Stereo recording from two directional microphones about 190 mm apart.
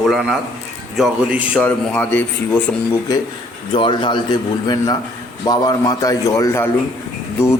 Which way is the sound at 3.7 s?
25° left (ahead or behind).